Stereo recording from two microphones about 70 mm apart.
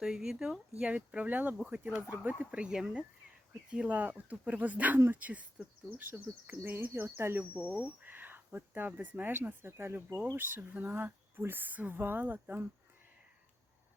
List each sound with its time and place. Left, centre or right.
0.0 s speech: centre
0.8 s speech: centre
4.9 s speech: right
5.2 s speech: right
7.5 s speech: centre